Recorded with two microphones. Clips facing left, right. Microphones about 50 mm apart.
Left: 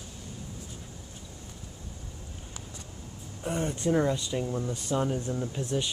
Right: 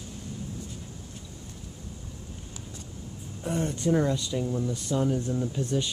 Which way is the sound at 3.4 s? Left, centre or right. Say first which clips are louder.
Right 1 dB; centre.